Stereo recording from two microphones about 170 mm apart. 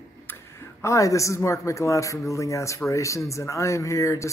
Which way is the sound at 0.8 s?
20° left (ahead or behind).